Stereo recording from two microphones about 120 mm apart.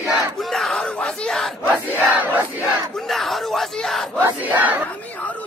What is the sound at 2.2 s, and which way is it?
Battle cry, 15° right (ahead or behind).